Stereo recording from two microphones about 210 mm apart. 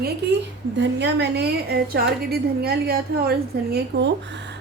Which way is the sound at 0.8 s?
55° right (ahead or behind).